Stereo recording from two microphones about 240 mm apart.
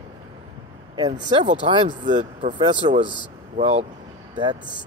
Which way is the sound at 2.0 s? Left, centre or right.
Right.